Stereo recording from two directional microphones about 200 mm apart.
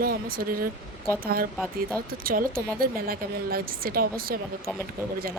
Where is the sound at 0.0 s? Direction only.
45° right (ahead or behind).